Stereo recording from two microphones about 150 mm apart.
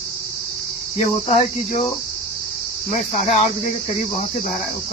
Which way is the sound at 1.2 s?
45° left (ahead or behind).